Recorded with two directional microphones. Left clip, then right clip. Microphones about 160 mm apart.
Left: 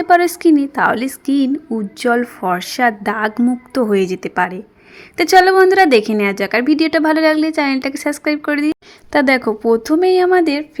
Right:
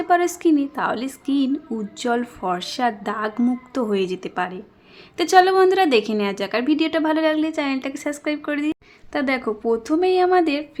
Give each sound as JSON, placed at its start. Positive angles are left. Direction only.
{"t": 0.0, "sound": "a woman's voice", "side_deg": 30}